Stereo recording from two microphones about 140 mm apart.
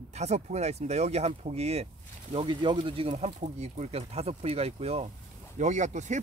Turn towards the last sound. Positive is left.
turn(degrees=-60)  # may be behind; listen again after turning